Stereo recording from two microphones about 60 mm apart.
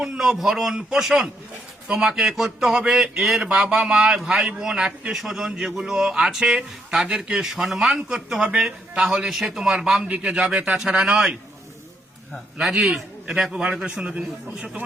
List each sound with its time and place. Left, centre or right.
0.0 s a man's voice: centre
10.8 s a man's voice: centre
12.8 s a man's voice: centre